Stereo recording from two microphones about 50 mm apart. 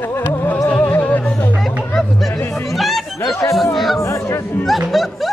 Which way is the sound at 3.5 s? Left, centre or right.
Centre.